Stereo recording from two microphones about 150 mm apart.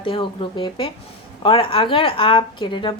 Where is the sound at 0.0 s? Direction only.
35° left (ahead or behind).